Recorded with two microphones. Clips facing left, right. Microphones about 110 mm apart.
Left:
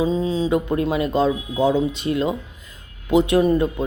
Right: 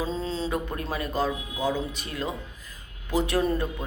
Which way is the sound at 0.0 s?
15° left (ahead or behind).